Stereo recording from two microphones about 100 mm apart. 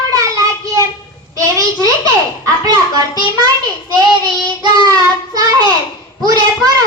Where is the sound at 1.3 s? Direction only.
30° right (ahead or behind).